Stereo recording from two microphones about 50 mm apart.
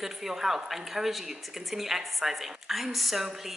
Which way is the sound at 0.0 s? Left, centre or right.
Centre.